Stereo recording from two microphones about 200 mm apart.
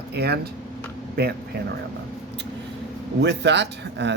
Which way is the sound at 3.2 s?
60° right (ahead or behind).